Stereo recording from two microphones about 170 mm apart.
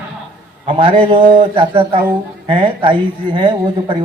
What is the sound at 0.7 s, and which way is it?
A man's voice, 30° right (ahead or behind).